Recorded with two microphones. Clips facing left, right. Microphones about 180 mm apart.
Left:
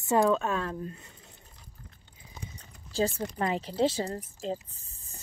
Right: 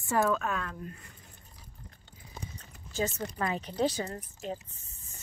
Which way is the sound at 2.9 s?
30° left (ahead or behind).